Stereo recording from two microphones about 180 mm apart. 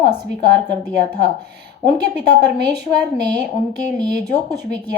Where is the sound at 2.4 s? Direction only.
65° right (ahead or behind).